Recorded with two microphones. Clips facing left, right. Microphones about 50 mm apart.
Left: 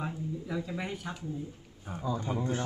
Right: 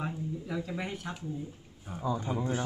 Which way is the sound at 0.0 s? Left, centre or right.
Centre.